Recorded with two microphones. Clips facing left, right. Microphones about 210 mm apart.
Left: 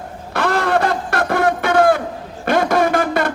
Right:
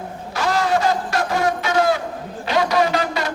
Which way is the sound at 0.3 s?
55° left (ahead or behind).